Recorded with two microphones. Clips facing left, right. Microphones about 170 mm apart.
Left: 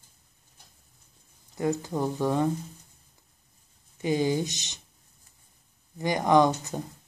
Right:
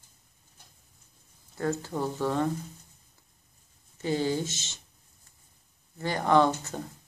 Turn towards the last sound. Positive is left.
turn(degrees=15)  # may be behind; listen again after turning